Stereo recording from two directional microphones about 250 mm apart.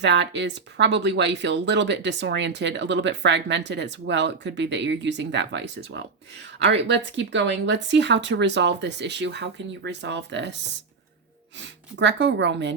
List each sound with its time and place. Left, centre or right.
0.0 s speech: right